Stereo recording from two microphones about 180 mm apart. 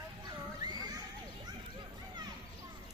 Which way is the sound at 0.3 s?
20° right (ahead or behind).